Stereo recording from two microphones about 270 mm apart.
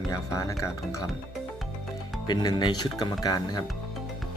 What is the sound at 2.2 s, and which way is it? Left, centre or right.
Speech, centre.